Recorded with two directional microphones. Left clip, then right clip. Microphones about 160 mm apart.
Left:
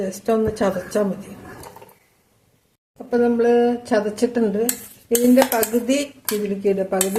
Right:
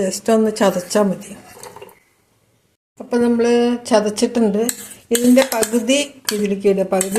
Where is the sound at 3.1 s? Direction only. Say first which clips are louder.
Right 1 dB; 35° right (ahead or behind).